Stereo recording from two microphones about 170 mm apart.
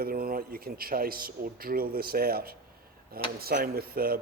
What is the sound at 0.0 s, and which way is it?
Speech, 60° right (ahead or behind).